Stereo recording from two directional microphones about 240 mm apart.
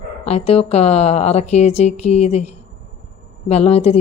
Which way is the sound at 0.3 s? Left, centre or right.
Left.